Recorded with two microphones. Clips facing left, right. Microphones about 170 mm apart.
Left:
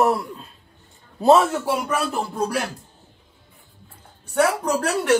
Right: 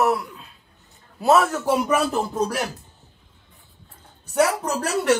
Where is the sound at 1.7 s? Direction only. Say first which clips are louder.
Right 3 dB; centre (ahead or behind).